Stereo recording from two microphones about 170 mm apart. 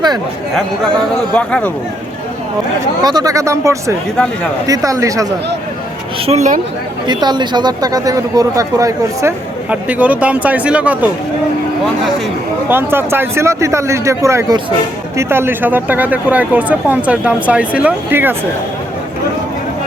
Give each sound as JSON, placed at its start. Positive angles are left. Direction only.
{"t": 1.3, "sound": "speech", "side_deg": 5}
{"t": 3.0, "sound": "speech", "side_deg": -25}
{"t": 6.2, "sound": "speech", "side_deg": -45}
{"t": 7.1, "sound": "speech", "side_deg": -25}
{"t": 9.6, "sound": "speech", "side_deg": -10}
{"t": 12.6, "sound": "speech", "side_deg": -10}